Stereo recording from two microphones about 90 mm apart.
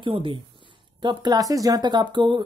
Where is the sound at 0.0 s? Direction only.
70° right (ahead or behind).